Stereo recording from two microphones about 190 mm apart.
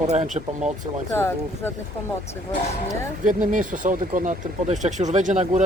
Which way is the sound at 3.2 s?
45° right (ahead or behind).